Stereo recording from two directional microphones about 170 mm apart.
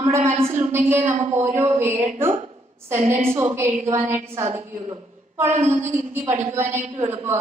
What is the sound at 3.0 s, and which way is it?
A woman's voice, 45° right (ahead or behind).